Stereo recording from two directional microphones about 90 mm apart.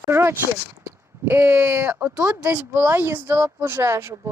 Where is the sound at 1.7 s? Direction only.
20° right (ahead or behind).